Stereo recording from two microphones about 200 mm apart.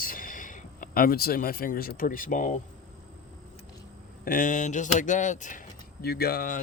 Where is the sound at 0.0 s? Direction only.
45° left (ahead or behind).